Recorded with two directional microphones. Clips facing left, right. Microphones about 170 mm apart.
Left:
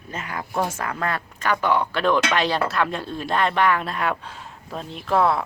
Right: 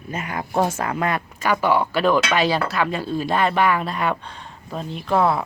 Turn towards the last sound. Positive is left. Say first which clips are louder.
# right 1 dB
turn(degrees=0)  # may be behind; listen again after turning